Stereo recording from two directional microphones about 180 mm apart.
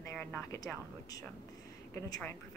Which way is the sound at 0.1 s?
10° left (ahead or behind).